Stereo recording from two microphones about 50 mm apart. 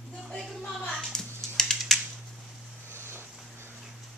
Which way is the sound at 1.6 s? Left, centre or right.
Centre.